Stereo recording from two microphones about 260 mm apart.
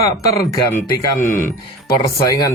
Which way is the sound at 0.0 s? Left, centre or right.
Centre.